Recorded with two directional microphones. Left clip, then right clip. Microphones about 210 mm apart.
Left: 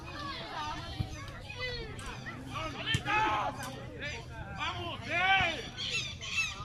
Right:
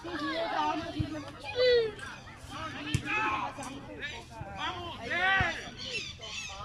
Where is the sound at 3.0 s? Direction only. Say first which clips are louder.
Left 1 dB; 40° left (ahead or behind).